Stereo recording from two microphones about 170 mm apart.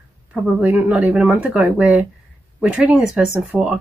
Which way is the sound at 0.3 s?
10° right (ahead or behind).